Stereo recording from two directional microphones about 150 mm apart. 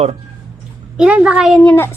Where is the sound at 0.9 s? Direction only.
5° right (ahead or behind).